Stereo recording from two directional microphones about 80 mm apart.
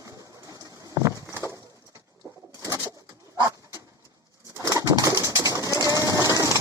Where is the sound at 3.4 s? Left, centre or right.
Right.